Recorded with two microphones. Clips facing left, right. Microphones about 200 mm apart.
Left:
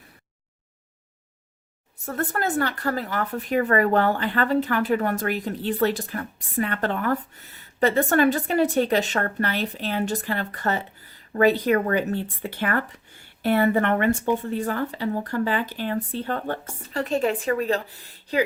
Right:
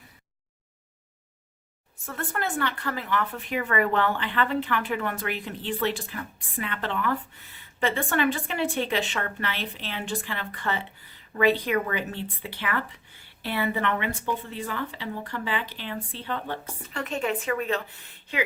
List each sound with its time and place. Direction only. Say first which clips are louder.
2.0 s speech: left 5 dB; 40° left (ahead or behind)